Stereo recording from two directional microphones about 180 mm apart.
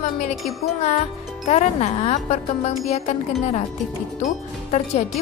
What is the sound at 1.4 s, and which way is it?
Speech, 35° left (ahead or behind).